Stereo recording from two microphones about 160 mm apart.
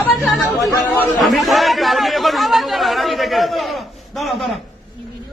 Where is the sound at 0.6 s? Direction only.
20° left (ahead or behind).